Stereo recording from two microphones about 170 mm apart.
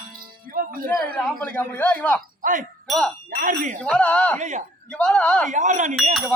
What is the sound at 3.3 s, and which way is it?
Speech, 50° right (ahead or behind).